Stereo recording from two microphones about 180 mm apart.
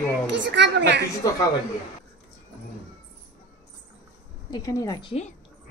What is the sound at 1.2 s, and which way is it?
Speech, 20° left (ahead or behind).